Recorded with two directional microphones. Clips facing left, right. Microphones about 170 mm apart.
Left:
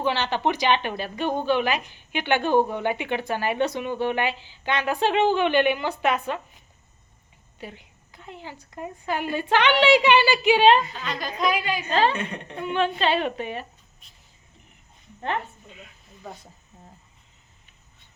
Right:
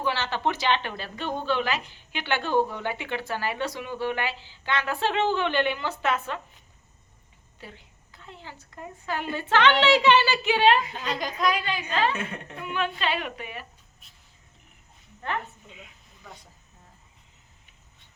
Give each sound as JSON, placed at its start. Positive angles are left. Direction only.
{"t": 0.0, "sound": "speech", "side_deg": 20}
{"t": 7.6, "sound": "a woman's voice", "side_deg": 15}
{"t": 11.3, "sound": "speech", "side_deg": 5}
{"t": 11.9, "sound": "a woman's voice", "side_deg": 30}
{"t": 12.1, "sound": "a woman's voice", "side_deg": -5}
{"t": 12.5, "sound": "a woman's voice", "side_deg": 30}